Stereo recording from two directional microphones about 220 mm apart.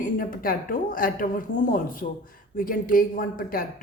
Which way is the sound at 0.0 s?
40° left (ahead or behind).